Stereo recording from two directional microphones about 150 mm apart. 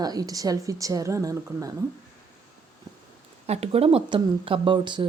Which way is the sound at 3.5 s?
40° right (ahead or behind).